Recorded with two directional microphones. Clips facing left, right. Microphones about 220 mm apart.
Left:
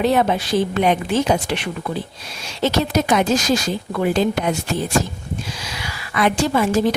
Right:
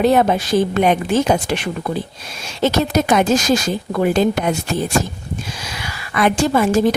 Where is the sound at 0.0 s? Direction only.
45° right (ahead or behind).